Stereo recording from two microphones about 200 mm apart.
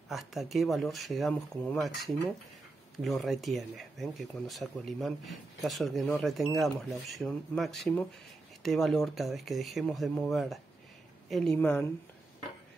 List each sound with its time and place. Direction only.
0.1 s speech: centre (ahead or behind)